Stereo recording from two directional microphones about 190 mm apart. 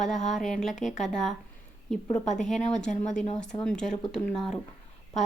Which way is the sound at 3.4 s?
5° left (ahead or behind).